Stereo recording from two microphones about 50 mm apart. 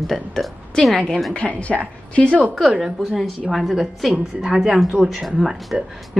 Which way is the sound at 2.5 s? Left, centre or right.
Centre.